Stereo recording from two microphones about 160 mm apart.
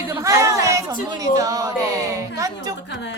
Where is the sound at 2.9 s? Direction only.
90° left.